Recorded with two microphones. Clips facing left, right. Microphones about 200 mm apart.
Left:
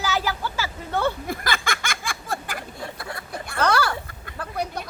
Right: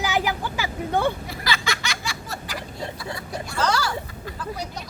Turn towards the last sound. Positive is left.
turn(degrees=55)  # may be behind; listen again after turning